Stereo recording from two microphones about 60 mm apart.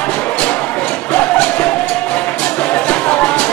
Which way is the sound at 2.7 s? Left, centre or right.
Left.